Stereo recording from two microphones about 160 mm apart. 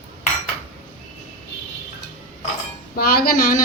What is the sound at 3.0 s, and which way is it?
Speech, 70° left (ahead or behind).